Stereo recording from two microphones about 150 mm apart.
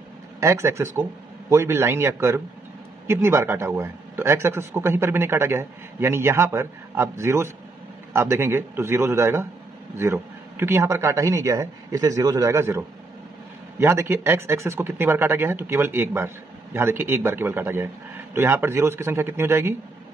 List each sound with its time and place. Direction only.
0.4 s a man's voice: 20° right (ahead or behind)